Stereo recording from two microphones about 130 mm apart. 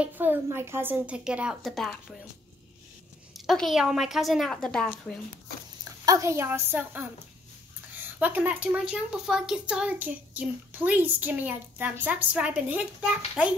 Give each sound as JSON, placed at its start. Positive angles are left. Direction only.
{"t": 0.0, "sound": "a woman's voice", "side_deg": -15}
{"t": 3.3, "sound": "a woman's voice", "side_deg": 0}
{"t": 6.0, "sound": "a woman's voice", "side_deg": -25}